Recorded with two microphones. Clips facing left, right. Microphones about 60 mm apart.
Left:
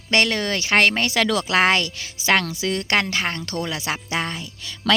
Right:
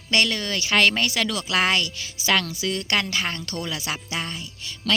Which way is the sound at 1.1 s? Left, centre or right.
Left.